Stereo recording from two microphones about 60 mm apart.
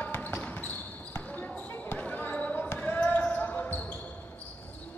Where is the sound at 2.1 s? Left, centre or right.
Left.